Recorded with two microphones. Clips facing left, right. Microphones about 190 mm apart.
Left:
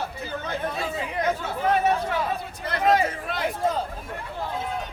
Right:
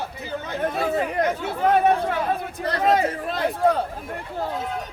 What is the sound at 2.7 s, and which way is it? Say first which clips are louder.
Speech: right 1 dB; 40° right (ahead or behind).